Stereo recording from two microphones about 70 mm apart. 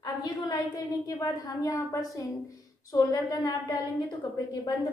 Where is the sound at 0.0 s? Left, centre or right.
Left.